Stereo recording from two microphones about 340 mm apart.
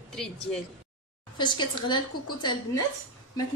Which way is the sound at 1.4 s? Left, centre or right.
Centre.